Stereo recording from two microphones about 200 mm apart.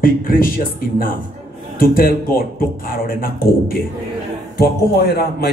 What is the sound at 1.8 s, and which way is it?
Speech, 45° left (ahead or behind).